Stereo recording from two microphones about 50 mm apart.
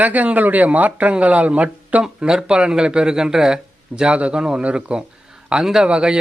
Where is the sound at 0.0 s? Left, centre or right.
Right.